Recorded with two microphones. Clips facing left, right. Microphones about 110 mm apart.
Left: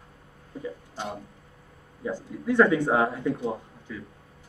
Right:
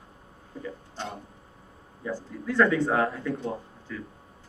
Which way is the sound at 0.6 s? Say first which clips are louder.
Left 2 dB; 10° left (ahead or behind).